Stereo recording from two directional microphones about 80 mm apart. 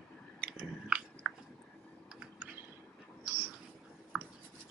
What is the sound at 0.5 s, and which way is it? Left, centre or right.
Chewing, centre.